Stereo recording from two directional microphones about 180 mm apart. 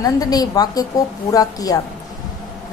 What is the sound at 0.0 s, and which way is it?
A woman's voice, 20° left (ahead or behind).